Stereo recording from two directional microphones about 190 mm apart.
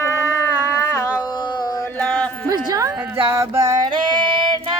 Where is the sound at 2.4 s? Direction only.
20° right (ahead or behind).